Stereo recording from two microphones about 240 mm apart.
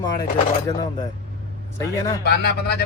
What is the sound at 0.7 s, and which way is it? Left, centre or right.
Speech, centre.